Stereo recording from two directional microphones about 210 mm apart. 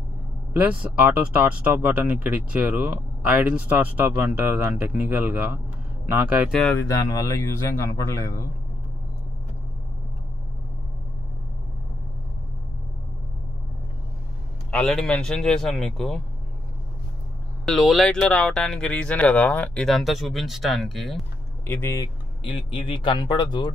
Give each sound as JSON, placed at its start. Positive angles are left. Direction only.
{"t": 0.5, "sound": "speech", "side_deg": -5}
{"t": 6.6, "sound": "a man's voice", "side_deg": 10}
{"t": 14.7, "sound": "speech", "side_deg": 5}
{"t": 17.6, "sound": "speech", "side_deg": 0}
{"t": 21.6, "sound": "speech", "side_deg": 10}